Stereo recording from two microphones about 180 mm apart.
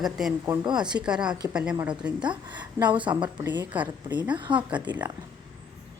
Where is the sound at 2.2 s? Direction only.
25° right (ahead or behind).